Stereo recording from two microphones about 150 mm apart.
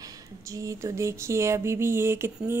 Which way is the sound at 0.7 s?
20° right (ahead or behind).